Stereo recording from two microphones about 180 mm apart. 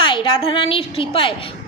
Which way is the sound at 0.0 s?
25° left (ahead or behind).